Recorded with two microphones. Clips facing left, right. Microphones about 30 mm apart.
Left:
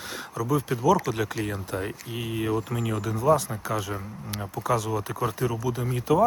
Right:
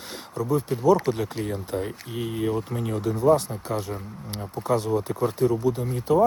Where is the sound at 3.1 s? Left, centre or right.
Left.